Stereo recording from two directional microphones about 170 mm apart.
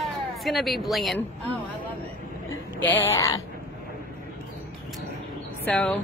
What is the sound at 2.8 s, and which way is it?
Speech, 10° left (ahead or behind).